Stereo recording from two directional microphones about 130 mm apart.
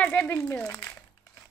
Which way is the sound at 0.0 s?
10° left (ahead or behind).